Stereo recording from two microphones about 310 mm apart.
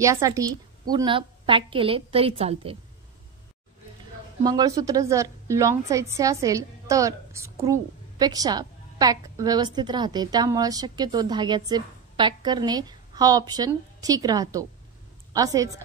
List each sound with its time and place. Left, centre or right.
0.0 s a woman's voice: centre
4.4 s a woman's voice: centre